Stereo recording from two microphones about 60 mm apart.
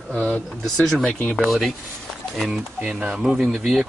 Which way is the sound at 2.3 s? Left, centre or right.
Centre.